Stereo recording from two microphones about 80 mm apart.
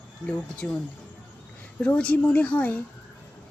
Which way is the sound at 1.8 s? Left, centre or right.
Centre.